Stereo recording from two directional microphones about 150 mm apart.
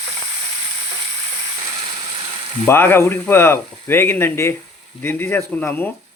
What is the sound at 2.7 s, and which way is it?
Speech, 15° left (ahead or behind).